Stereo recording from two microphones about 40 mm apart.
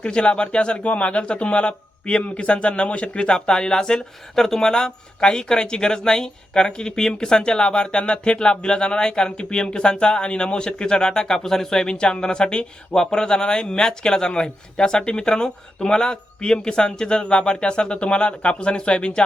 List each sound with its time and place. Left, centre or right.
0.0 s speech: left